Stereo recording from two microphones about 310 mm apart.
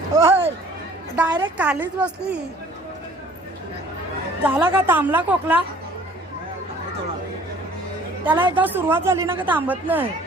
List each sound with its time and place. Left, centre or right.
0.3 s a sound: centre
1.1 s a woman's voice: centre
4.4 s a woman's voice: centre
8.2 s a woman's voice: centre